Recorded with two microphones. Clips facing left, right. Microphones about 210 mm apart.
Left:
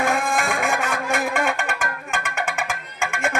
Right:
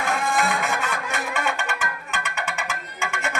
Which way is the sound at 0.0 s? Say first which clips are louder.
Left 2 dB; 50° left (ahead or behind).